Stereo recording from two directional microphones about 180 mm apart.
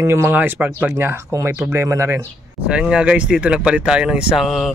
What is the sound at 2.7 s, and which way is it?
Speech, 5° right (ahead or behind).